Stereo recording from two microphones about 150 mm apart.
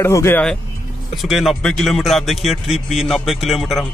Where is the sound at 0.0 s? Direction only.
15° left (ahead or behind).